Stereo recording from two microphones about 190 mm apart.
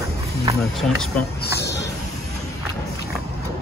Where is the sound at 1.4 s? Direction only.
60° left (ahead or behind).